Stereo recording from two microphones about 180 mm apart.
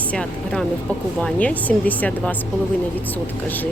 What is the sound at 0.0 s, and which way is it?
A woman's voice, 5° left (ahead or behind).